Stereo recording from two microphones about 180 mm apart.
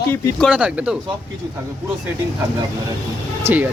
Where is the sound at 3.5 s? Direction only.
10° right (ahead or behind).